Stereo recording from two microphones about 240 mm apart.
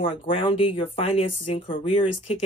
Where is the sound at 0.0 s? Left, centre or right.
Left.